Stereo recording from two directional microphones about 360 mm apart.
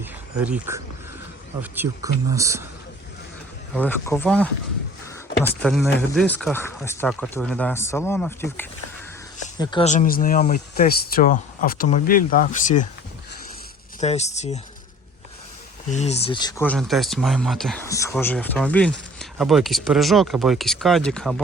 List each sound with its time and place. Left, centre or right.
0.0 s a sound: centre
2.3 s speech: centre
3.8 s speech: centre
14.0 s speech: centre
15.9 s speech: centre